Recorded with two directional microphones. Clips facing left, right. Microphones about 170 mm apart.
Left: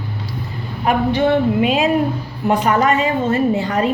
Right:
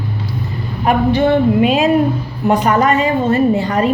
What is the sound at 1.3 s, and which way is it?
A woman's voice, 45° right (ahead or behind).